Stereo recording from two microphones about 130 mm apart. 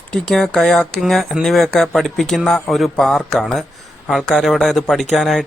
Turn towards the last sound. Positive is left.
turn(degrees=0)  # may be behind; listen again after turning